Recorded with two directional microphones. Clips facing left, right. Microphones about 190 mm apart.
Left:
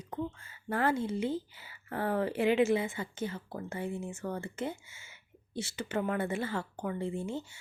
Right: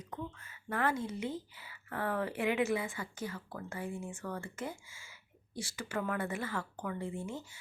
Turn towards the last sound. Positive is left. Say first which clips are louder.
# left 4 dB
turn(degrees=25)  # may be behind; listen again after turning